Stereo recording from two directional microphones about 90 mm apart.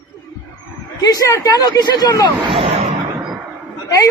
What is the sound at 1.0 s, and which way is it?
A woman's voice, 40° left (ahead or behind).